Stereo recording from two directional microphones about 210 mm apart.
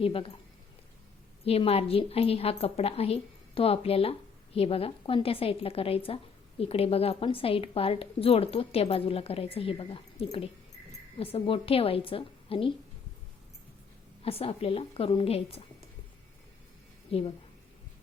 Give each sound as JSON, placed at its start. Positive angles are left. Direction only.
{"t": 0.0, "sound": "a woman's voice", "side_deg": 25}
{"t": 1.5, "sound": "a woman's voice", "side_deg": 30}
{"t": 14.2, "sound": "a woman's voice", "side_deg": 30}
{"t": 17.1, "sound": "a woman's voice", "side_deg": 25}